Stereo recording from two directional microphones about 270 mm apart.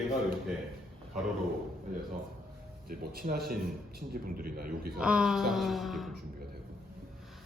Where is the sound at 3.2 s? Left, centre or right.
Right.